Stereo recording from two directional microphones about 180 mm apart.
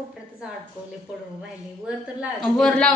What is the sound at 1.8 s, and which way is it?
A woman's voice, centre (ahead or behind).